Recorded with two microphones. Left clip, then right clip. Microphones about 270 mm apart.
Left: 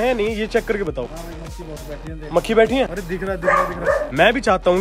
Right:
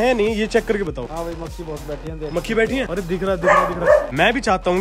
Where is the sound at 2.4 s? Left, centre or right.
Centre.